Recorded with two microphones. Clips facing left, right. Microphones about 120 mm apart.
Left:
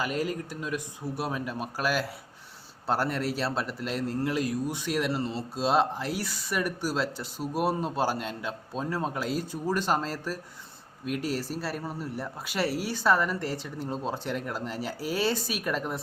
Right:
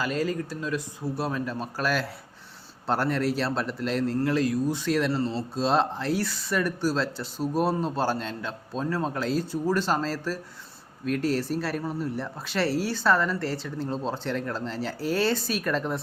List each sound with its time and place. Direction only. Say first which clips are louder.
0.0 s speech: right 2 dB; 15° left (ahead or behind)
5.2 s speech: right 4 dB; 35° right (ahead or behind)
5.5 s speech: even; 10° left (ahead or behind)